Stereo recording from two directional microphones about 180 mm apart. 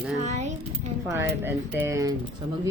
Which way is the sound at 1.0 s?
15° right (ahead or behind).